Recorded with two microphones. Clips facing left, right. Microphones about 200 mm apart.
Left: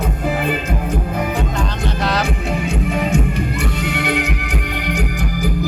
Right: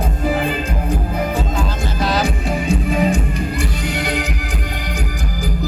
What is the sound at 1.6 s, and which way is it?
Music, centre (ahead or behind).